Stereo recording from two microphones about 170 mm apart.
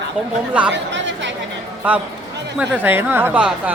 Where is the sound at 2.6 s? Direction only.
10° right (ahead or behind).